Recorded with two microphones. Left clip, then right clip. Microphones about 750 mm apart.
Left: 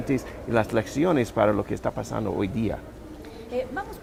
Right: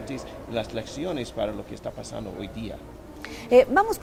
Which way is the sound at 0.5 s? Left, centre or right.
Left.